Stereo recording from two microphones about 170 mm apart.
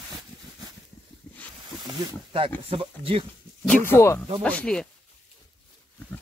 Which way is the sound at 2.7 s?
35° right (ahead or behind).